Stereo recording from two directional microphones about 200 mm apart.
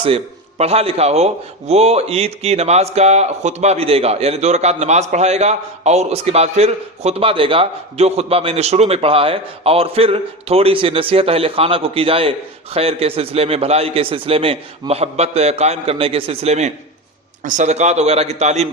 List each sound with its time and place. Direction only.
0.6 s a man's voice: 30° right (ahead or behind)